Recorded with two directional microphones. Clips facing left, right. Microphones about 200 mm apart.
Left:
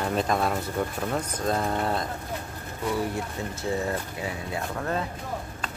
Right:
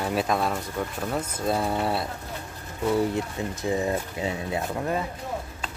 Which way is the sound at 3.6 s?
15° right (ahead or behind).